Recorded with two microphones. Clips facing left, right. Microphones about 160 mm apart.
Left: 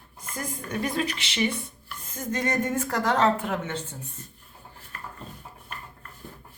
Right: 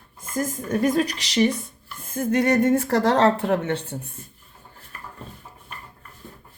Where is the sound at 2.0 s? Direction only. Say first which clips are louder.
Right 8 dB; 55° right (ahead or behind).